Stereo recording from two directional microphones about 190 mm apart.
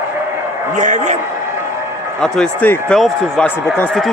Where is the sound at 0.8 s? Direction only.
40° right (ahead or behind).